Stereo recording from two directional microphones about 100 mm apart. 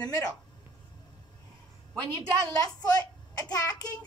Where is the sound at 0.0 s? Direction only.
40° left (ahead or behind).